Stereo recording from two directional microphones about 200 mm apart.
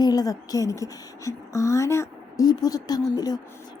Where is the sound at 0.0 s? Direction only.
20° left (ahead or behind).